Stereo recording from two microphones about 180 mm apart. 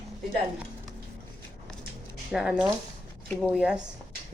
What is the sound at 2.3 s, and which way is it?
A woman's voice, 5° right (ahead or behind).